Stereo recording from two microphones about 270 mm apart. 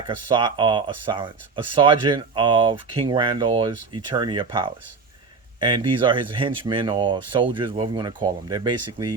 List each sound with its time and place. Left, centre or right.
0.3 s speech: centre